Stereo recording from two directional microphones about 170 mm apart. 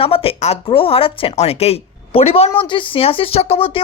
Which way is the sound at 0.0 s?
35° left (ahead or behind).